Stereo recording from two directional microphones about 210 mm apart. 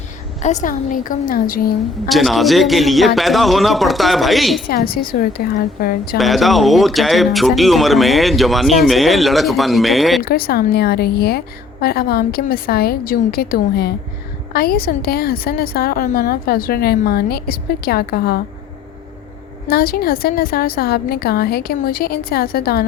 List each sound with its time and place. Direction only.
0.4 s a woman's voice: 35° left (ahead or behind)
2.0 s speech: centre (ahead or behind)
4.7 s a woman's voice: 45° left (ahead or behind)
6.1 s speech: centre (ahead or behind)
10.2 s a woman's voice: 45° left (ahead or behind)
19.6 s a woman's voice: 45° left (ahead or behind)